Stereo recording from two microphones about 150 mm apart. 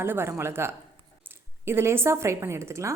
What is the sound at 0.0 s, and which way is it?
A woman's voice, 15° right (ahead or behind).